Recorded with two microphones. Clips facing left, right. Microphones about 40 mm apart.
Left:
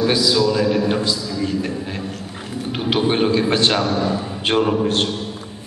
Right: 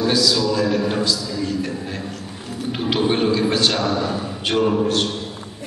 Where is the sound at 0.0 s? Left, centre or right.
Left.